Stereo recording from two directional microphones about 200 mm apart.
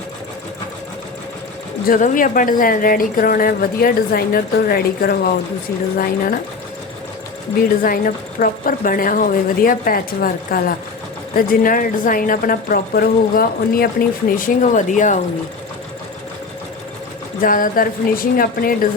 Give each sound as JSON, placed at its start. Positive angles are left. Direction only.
{"t": 1.9, "sound": "speech", "side_deg": 40}
{"t": 7.8, "sound": "speech", "side_deg": 45}
{"t": 17.4, "sound": "speech", "side_deg": 45}